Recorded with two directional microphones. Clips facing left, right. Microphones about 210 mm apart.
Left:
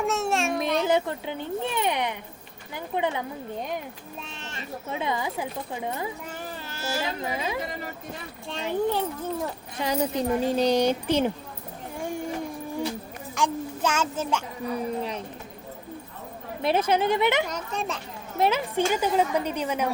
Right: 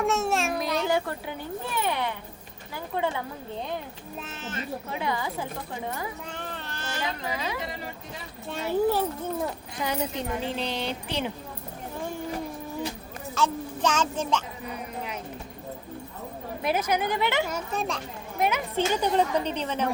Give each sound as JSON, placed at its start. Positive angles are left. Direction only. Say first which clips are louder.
{"t": 0.0, "sound": "a sound", "louder": "even", "side_deg": 0}
{"t": 0.9, "sound": "a woman's voice", "louder": "left 3 dB", "side_deg": 20}
{"t": 4.3, "sound": "speech", "louder": "right 4 dB", "side_deg": 0}
{"t": 4.9, "sound": "a woman's voice", "louder": "left 3 dB", "side_deg": 20}
{"t": 6.3, "sound": "a sound", "louder": "even", "side_deg": 5}
{"t": 7.0, "sound": "a woman's voice", "louder": "right 1 dB", "side_deg": 25}
{"t": 8.4, "sound": "a child's voice", "louder": "right 2 dB", "side_deg": -5}
{"t": 9.8, "sound": "speech", "louder": "left 4 dB", "side_deg": 35}
{"t": 11.9, "sound": "a sound", "louder": "left 2 dB", "side_deg": 15}
{"t": 13.3, "sound": "a child's voice", "louder": "even", "side_deg": 10}
{"t": 16.6, "sound": "a woman's voice", "louder": "left 4 dB", "side_deg": 30}
{"t": 17.5, "sound": "speech", "louder": "right 1 dB", "side_deg": -5}
{"t": 18.3, "sound": "a woman's voice", "louder": "left 3 dB", "side_deg": 30}
{"t": 18.8, "sound": "a woman's voice", "louder": "even", "side_deg": 5}